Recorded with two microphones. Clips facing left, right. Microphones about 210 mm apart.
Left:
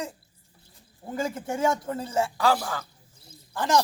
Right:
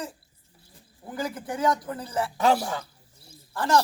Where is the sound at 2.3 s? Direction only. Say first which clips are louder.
Right 2 dB; 20° right (ahead or behind).